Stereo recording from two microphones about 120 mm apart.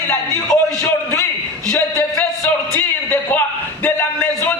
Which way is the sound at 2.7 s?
15° left (ahead or behind).